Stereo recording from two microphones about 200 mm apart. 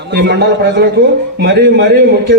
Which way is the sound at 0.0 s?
55° right (ahead or behind).